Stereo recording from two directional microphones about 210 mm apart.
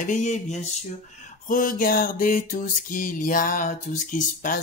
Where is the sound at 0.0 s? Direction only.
35° left (ahead or behind).